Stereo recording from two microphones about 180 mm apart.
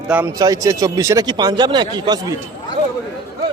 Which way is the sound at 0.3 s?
20° right (ahead or behind).